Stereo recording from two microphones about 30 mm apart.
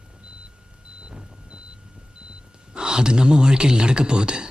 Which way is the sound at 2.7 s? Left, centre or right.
Right.